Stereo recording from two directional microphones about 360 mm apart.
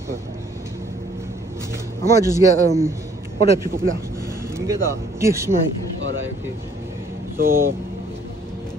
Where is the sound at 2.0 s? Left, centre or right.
Centre.